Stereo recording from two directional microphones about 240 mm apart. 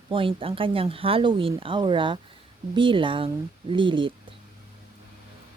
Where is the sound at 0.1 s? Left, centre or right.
Right.